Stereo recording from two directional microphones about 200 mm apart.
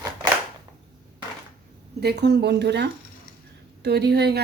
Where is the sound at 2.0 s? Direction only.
55° right (ahead or behind).